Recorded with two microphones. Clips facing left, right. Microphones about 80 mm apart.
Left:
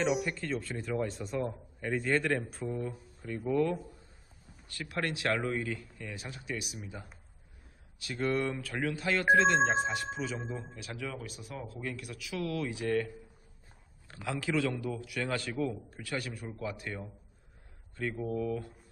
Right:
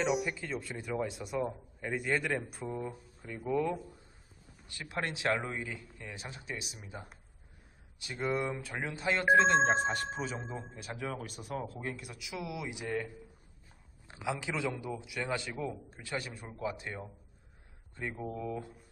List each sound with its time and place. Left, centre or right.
0.0 s a man's voice: centre
4.7 s a man's voice: right
6.1 s a man's voice: right
7.9 s a man's voice: centre
9.7 s speech: right
11.8 s a man's voice: right
14.1 s a man's voice: centre